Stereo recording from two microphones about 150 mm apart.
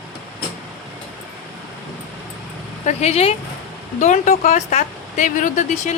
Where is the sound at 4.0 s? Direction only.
55° left (ahead or behind).